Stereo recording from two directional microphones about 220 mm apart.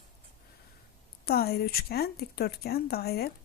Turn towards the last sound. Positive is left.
turn(degrees=45)  # may be behind; listen again after turning